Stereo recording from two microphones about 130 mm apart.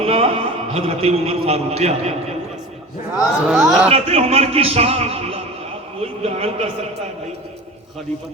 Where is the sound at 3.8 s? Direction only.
55° right (ahead or behind).